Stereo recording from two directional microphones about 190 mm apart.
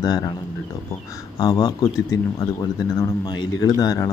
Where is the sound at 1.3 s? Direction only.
20° left (ahead or behind).